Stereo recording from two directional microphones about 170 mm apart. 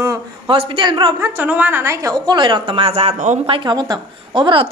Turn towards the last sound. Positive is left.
turn(degrees=-30)  # may be behind; listen again after turning